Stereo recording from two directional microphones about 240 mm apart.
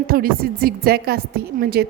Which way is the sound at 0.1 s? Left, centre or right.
Right.